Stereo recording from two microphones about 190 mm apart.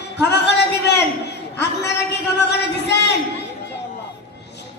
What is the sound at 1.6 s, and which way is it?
Speech, 60° left (ahead or behind).